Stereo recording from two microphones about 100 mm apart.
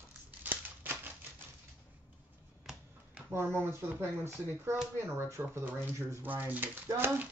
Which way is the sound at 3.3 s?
25° right (ahead or behind).